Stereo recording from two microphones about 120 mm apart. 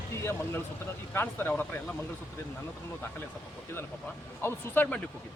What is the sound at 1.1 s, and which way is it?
Speech, 15° left (ahead or behind).